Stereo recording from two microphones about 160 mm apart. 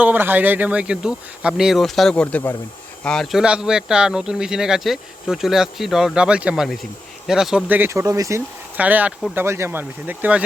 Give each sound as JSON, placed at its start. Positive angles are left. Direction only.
{"t": 0.0, "sound": "speech", "side_deg": -10}